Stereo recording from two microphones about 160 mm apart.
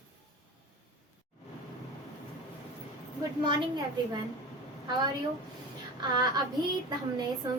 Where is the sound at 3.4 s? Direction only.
30° right (ahead or behind).